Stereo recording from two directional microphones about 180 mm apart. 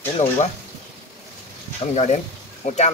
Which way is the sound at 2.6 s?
40° left (ahead or behind).